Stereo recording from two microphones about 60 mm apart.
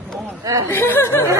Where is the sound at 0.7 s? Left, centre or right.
Left.